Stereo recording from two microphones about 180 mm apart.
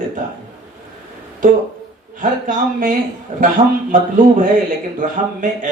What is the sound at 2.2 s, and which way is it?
A man's voice, 45° right (ahead or behind).